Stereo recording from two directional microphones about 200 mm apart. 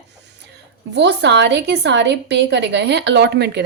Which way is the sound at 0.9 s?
60° right (ahead or behind).